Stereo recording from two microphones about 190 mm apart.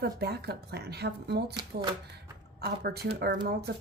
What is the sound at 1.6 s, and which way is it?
Speech, 20° right (ahead or behind).